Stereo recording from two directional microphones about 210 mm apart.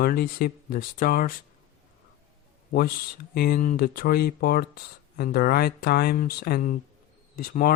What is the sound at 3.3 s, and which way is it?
Speech, 45° left (ahead or behind).